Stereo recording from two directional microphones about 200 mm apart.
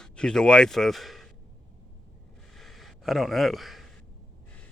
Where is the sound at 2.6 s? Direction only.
Centre (ahead or behind).